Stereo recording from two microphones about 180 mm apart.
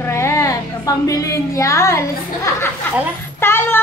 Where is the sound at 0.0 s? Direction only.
15° left (ahead or behind).